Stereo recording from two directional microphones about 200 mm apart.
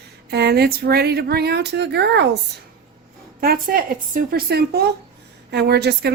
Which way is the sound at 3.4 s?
45° right (ahead or behind).